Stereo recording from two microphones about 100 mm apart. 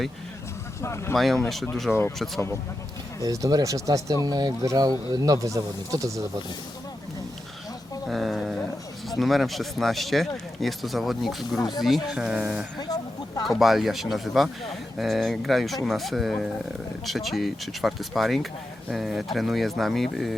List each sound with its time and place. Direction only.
0.8 s speech: 30° left (ahead or behind)
1.1 s speech: centre (ahead or behind)
1.9 s speech: 25° left (ahead or behind)
2.1 s speech: centre (ahead or behind)
3.2 s speech: 35° right (ahead or behind)
8.0 s a sound: centre (ahead or behind)
9.0 s speech: centre (ahead or behind)
12.9 s a sound: 40° left (ahead or behind)
13.5 s speech: centre (ahead or behind)